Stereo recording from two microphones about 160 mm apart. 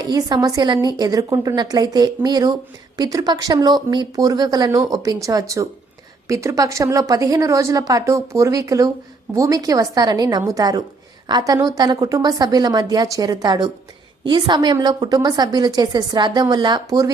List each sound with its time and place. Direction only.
0.0 s a woman's voice: 25° right (ahead or behind)